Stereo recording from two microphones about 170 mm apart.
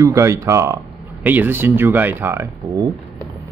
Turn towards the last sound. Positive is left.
turn(degrees=-25)  # may be behind; listen again after turning